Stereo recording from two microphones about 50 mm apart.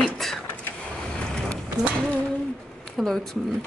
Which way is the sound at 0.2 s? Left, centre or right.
Centre.